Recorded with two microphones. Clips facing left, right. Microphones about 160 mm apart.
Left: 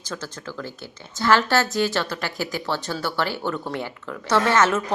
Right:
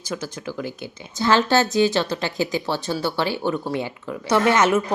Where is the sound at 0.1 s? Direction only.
15° right (ahead or behind).